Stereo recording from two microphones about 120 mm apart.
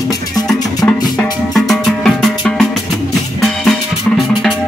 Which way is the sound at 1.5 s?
Centre (ahead or behind).